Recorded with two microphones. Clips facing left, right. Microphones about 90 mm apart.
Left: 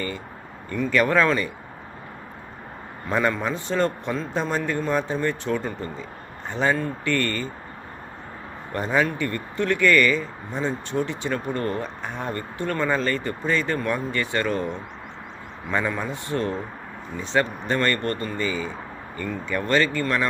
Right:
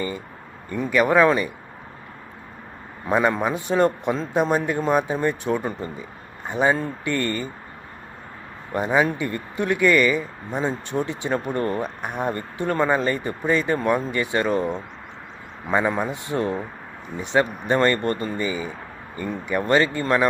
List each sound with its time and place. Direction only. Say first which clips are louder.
0.7 s speech: right 2 dB; 15° right (ahead or behind)
3.1 s speech: right 3 dB; 15° right (ahead or behind)
8.7 s speech: right 2 dB; 15° right (ahead or behind)
15.7 s speech: right 4 dB; 20° right (ahead or behind)